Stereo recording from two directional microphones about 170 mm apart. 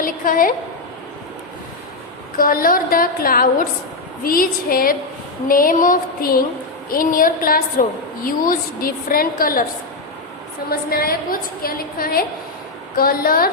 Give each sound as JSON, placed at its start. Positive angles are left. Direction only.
{"t": 0.0, "sound": "a woman's voice", "side_deg": 55}
{"t": 2.4, "sound": "a woman's voice", "side_deg": 55}
{"t": 10.7, "sound": "a woman's voice", "side_deg": 60}